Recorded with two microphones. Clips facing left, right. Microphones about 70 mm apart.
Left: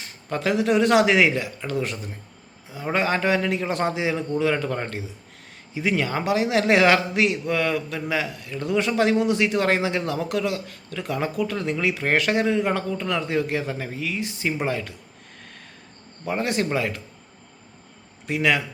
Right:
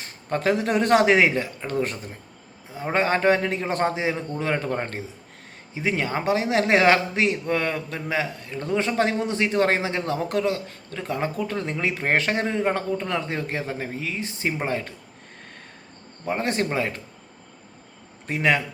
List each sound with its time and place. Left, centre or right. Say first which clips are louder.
0.3 s a man's voice: left 1 dB; right
16.4 s a man's voice: left 1 dB; right
18.3 s a man's voice: even; right